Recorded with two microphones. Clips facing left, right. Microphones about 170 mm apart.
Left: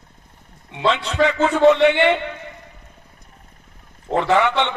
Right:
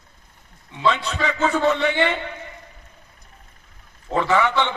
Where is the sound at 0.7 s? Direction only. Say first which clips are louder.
Left 1 dB; 70° left (ahead or behind).